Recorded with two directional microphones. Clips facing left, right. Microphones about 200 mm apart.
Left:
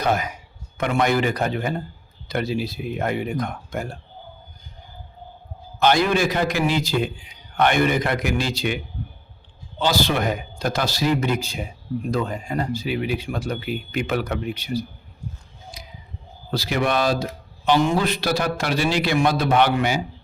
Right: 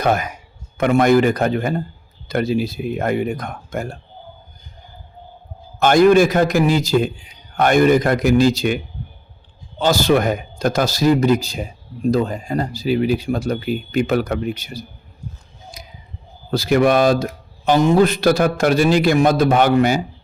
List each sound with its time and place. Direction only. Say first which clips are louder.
0.0 s a man's voice: right 4 dB; 50° right (ahead or behind)
5.8 s a man's voice: right 7 dB; 50° right (ahead or behind)
9.8 s a man's voice: right 6 dB; 45° right (ahead or behind)
15.8 s a sound: right 2 dB; 45° right (ahead or behind)
16.5 s a man's voice: right 8 dB; 50° right (ahead or behind)